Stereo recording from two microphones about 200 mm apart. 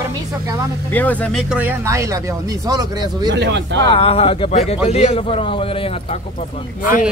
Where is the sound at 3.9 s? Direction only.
30° left (ahead or behind).